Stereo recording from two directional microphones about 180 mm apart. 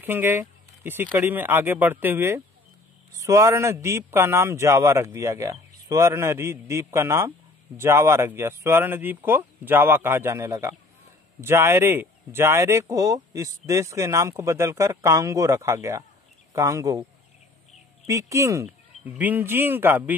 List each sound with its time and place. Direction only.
0.0 s a sound: 10° right (ahead or behind)
1.0 s speech: 10° right (ahead or behind)
18.0 s speech: 15° right (ahead or behind)